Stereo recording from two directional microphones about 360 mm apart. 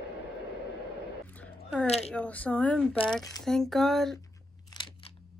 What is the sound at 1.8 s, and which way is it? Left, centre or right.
Speech, centre.